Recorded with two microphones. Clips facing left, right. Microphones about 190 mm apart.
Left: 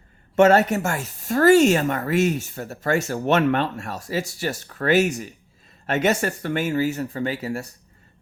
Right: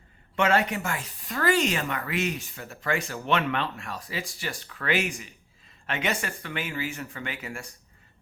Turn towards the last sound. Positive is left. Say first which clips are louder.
# left 10 dB
turn(degrees=40)  # may be behind; listen again after turning